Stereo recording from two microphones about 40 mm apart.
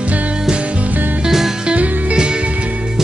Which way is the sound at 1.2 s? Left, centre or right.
Centre.